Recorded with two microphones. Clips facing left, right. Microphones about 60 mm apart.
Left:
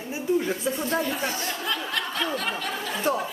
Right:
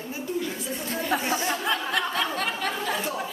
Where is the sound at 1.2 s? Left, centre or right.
Right.